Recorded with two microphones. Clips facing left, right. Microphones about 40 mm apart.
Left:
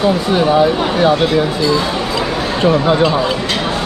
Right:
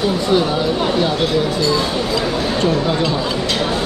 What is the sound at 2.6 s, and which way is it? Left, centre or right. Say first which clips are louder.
Speech: left 7 dB; left.